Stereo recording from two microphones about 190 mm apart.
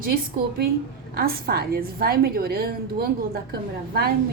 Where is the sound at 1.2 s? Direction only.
55° right (ahead or behind).